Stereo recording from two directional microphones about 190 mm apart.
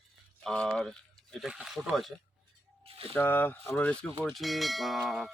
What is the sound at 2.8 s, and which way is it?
Speech, 30° right (ahead or behind).